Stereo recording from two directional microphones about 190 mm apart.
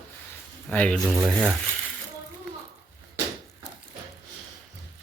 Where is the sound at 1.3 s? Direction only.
5° right (ahead or behind).